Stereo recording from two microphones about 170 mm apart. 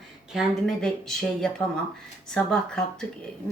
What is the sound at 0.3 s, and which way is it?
Speech, 5° left (ahead or behind).